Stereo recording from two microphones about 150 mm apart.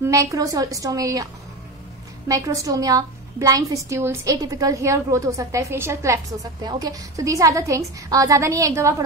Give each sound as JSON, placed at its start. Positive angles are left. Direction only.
{"t": 0.0, "sound": "a woman's voice", "side_deg": -20}